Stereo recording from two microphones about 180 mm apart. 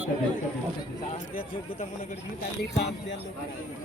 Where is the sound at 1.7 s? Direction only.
45° left (ahead or behind).